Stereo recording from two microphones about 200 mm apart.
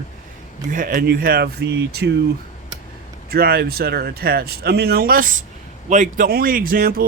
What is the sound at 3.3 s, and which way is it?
Speech, 50° right (ahead or behind).